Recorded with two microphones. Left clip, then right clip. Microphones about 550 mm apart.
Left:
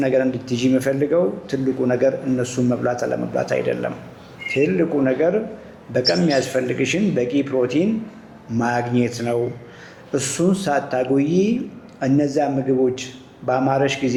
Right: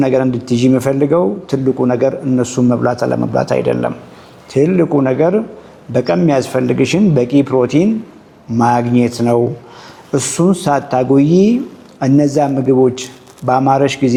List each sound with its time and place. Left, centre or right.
0.0 s speech: right